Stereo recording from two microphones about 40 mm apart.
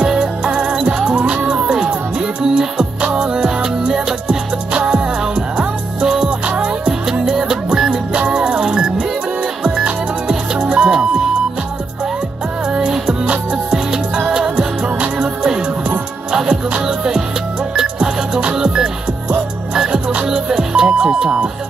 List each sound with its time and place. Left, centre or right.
0.0 s music: centre
6.9 s music: centre
12.7 s music: centre
14.3 s music: centre